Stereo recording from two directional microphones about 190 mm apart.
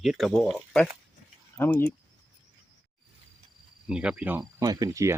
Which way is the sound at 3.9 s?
5° right (ahead or behind).